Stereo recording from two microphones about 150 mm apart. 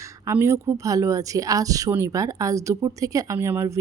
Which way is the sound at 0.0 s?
20° right (ahead or behind).